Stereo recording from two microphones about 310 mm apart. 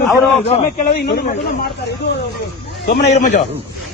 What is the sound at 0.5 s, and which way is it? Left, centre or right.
Speech, left.